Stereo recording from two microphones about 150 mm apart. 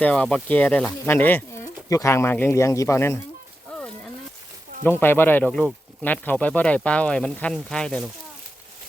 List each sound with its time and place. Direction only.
0.0 s speech: 5° left (ahead or behind)
4.8 s speech: 15° left (ahead or behind)